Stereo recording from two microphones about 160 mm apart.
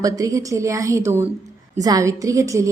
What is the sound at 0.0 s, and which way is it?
A woman's voice, 20° right (ahead or behind).